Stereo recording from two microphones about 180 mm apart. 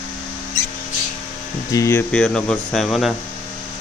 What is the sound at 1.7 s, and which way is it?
Speech, 15° left (ahead or behind).